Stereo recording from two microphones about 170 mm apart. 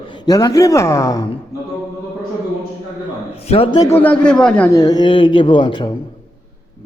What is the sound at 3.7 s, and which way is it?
Speech, 20° left (ahead or behind).